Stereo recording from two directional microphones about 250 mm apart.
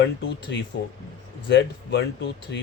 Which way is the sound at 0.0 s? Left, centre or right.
Left.